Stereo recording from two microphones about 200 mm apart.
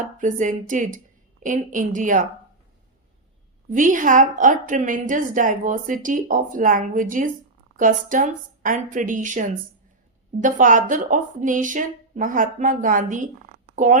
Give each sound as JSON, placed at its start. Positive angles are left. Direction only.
{"t": 0.2, "sound": "a woman's voice", "side_deg": -40}
{"t": 3.7, "sound": "a woman's voice", "side_deg": -40}